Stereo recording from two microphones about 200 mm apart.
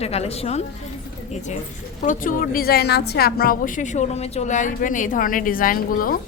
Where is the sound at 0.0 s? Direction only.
30° left (ahead or behind).